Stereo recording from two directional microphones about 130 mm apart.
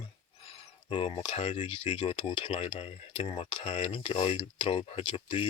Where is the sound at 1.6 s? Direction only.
45° left (ahead or behind).